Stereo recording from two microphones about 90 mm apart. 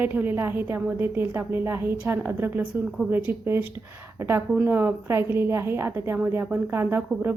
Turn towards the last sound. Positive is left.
turn(degrees=-25)  # may be behind; listen again after turning